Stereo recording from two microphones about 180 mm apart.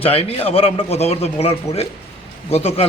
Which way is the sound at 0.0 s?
30° left (ahead or behind).